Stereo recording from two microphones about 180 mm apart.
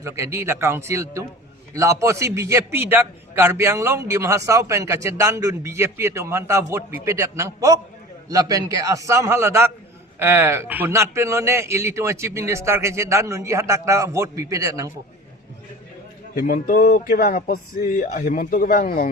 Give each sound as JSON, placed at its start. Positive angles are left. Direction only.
{"t": 0.0, "sound": "a man's voice", "side_deg": -15}
{"t": 16.3, "sound": "speech", "side_deg": 55}